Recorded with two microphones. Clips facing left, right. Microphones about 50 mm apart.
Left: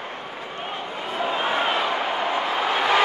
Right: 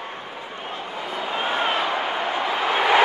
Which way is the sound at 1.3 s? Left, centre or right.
Centre.